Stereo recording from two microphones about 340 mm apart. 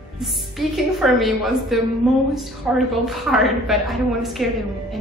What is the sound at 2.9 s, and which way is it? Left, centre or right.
A woman's voice, centre.